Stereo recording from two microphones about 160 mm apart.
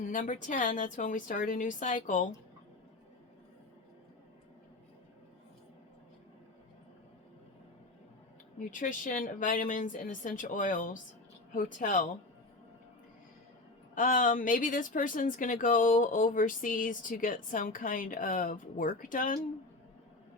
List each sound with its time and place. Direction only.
0.0 s speech: 55° left (ahead or behind)
8.5 s speech: 55° left (ahead or behind)
13.9 s speech: 55° left (ahead or behind)